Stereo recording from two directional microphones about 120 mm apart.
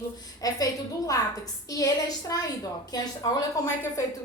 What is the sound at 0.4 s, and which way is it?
A woman's voice, 30° left (ahead or behind).